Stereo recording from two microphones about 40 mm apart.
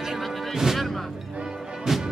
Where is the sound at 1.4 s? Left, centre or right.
Centre.